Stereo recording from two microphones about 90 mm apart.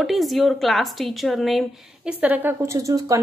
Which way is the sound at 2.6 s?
35° right (ahead or behind).